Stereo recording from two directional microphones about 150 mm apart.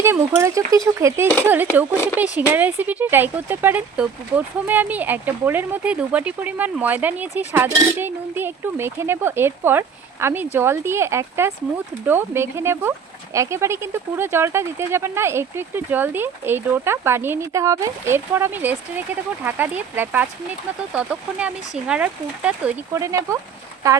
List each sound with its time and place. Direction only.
0.0 s speech: 15° right (ahead or behind)